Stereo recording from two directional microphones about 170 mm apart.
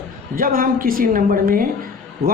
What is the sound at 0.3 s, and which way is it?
A woman's voice, 55° right (ahead or behind).